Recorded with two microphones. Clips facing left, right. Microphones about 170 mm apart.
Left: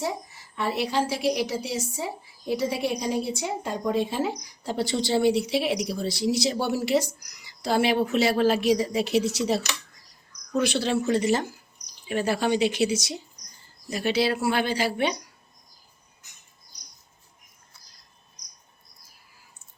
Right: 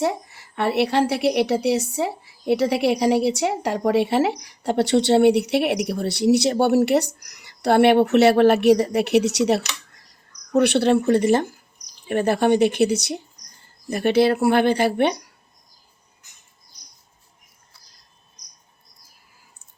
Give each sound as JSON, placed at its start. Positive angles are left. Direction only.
{"t": 0.0, "sound": "a woman's voice", "side_deg": -65}